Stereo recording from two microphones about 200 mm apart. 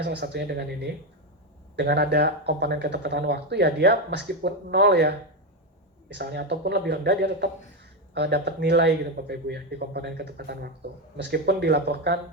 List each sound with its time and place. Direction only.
0.0 s speech: 55° right (ahead or behind)